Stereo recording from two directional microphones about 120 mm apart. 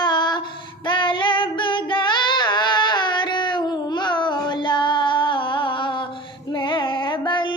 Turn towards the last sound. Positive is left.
turn(degrees=45)  # may be behind; listen again after turning